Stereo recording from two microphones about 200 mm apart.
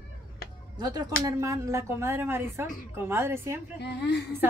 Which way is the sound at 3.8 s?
60° left (ahead or behind).